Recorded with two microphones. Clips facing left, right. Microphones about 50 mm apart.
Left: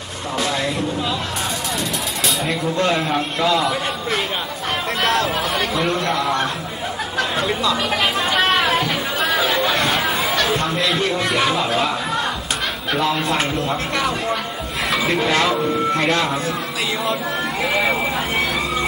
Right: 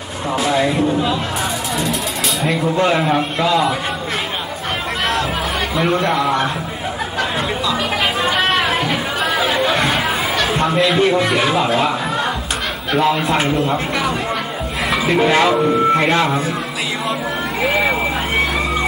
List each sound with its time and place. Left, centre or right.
0.4 s speech: centre
2.7 s speech: centre
5.8 s speech: centre
7.2 s chatter: centre
12.9 s a man's voice: centre